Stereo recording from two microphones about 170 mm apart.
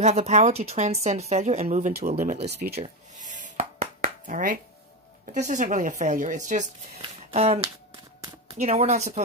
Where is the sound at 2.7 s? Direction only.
50° right (ahead or behind).